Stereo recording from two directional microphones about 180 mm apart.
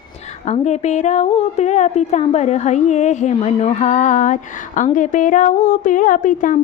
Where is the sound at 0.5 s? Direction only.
40° left (ahead or behind).